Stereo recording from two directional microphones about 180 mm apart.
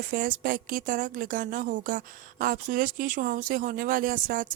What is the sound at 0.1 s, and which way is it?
A woman's voice, 50° right (ahead or behind).